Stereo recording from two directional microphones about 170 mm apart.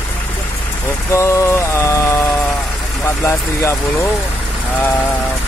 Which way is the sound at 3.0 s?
15° left (ahead or behind).